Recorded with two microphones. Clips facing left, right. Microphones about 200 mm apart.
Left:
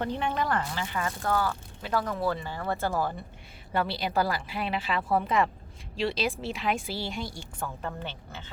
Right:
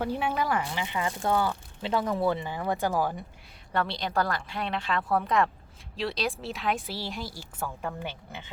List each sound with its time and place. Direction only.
0.0 s speech: 5° right (ahead or behind)
3.7 s a woman's voice: 5° left (ahead or behind); by 8.4 s 15° right (ahead or behind)